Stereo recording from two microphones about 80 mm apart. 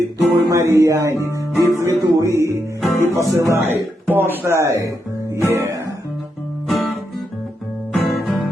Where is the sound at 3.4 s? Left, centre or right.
Right.